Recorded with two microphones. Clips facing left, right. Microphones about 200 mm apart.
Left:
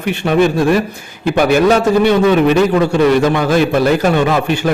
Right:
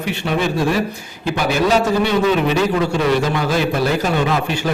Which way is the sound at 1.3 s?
55° left (ahead or behind).